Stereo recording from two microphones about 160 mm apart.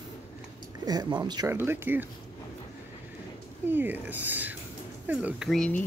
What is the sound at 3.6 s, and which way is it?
Speech, 10° right (ahead or behind).